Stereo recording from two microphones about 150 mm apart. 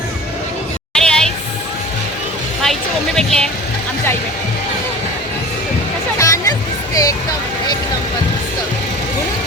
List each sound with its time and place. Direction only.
0.9 s a sound: 5° left (ahead or behind)
3.2 s speech: 5° left (ahead or behind)
6.1 s music: 20° left (ahead or behind)